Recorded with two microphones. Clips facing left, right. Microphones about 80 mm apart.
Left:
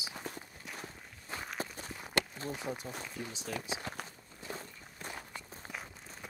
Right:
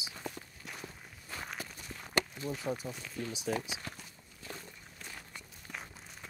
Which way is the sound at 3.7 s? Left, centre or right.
Left.